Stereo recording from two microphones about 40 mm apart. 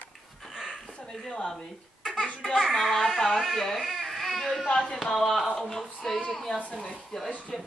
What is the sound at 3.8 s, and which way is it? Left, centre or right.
Baby cry, centre.